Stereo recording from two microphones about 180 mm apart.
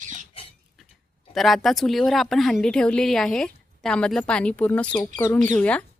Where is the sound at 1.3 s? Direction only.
Centre (ahead or behind).